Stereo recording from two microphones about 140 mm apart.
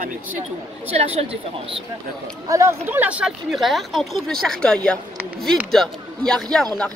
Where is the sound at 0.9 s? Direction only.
45° right (ahead or behind).